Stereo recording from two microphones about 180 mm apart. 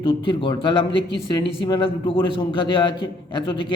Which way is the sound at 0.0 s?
30° left (ahead or behind).